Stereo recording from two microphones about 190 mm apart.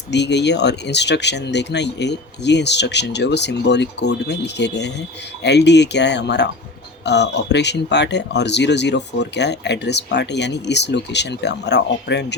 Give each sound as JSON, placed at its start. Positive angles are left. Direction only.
{"t": 0.1, "sound": "speech", "side_deg": 65}